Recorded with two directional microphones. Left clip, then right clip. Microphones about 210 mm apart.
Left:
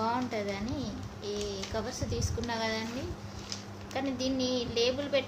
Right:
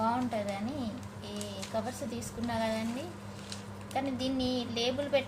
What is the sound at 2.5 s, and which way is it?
Speech, 20° left (ahead or behind).